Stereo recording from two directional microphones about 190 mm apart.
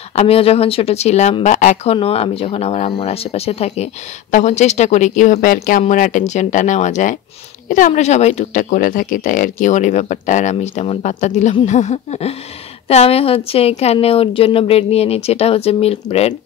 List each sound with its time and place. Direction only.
0.1 s speech: 30° left (ahead or behind)